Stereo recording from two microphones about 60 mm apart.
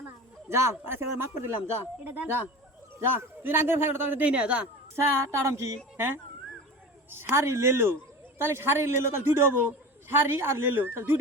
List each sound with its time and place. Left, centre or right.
0.4 s a man's voice: right
4.3 s speech: right
4.9 s a man's voice: right